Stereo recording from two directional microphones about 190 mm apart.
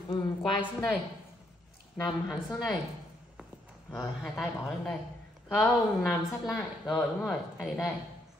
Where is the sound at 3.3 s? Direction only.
5° right (ahead or behind).